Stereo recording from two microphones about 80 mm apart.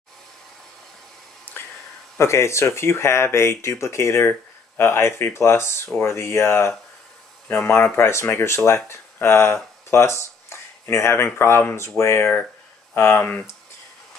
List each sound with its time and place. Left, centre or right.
1.4 s whispering: left
2.1 s speech: left